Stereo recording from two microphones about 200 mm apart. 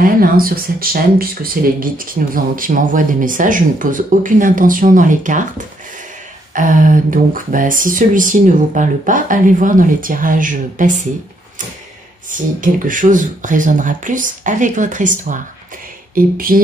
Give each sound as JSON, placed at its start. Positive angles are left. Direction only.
{"t": 0.0, "sound": "speech", "side_deg": -45}
{"t": 6.5, "sound": "speech", "side_deg": -40}
{"t": 12.3, "sound": "speech", "side_deg": -40}